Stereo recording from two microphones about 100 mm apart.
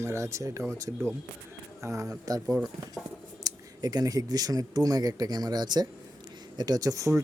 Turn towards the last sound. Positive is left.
turn(degrees=-35)  # may be behind; listen again after turning